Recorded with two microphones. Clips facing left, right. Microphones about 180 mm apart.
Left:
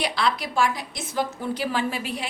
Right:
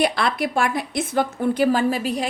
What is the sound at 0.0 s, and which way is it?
A woman's voice, 55° right (ahead or behind).